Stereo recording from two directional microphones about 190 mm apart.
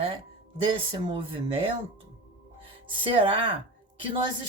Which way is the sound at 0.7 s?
30° right (ahead or behind).